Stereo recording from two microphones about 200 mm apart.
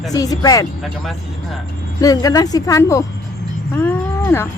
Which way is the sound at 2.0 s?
20° left (ahead or behind).